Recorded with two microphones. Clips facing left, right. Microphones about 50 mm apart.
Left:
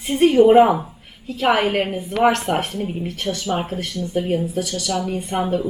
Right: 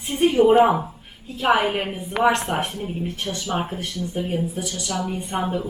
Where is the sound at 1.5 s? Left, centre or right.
Centre.